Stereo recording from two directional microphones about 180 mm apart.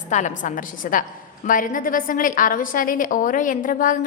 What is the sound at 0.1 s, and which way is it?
A woman's voice, 40° left (ahead or behind).